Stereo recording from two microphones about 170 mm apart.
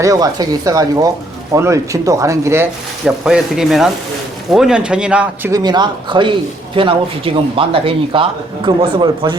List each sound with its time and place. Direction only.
0.0 s a man's voice: 20° right (ahead or behind)
3.0 s a man's voice: 5° right (ahead or behind); by 9.4 s 30° right (ahead or behind)